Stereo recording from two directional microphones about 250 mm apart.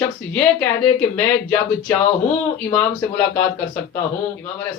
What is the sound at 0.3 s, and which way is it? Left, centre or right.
Speech, centre.